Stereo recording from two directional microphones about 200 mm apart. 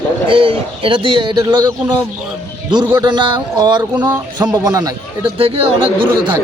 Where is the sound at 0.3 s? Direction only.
25° right (ahead or behind).